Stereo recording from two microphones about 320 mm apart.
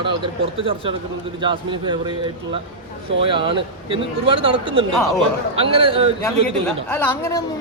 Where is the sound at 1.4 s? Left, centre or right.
Centre.